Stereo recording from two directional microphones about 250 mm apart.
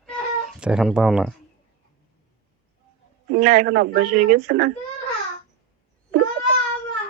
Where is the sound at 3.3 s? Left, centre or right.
Right.